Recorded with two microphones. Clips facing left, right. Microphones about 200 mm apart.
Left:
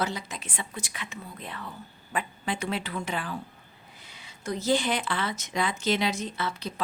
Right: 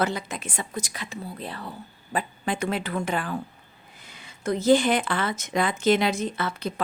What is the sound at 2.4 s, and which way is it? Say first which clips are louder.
Speech: right 4 dB; 50° right (ahead or behind).